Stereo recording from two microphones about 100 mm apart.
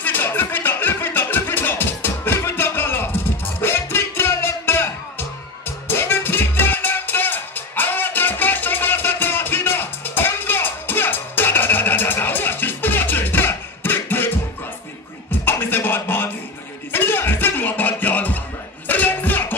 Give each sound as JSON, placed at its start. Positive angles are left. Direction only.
{"t": 0.0, "sound": "music", "side_deg": 20}
{"t": 5.9, "sound": "music", "side_deg": 20}
{"t": 15.4, "sound": "music", "side_deg": 20}